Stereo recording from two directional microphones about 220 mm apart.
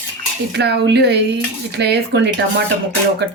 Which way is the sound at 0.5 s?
50° right (ahead or behind).